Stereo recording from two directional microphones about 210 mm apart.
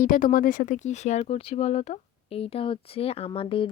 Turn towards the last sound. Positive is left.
turn(degrees=25)  # may be behind; listen again after turning